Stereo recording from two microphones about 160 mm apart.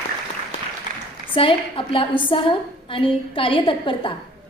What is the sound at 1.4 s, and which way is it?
A woman's voice, 35° left (ahead or behind).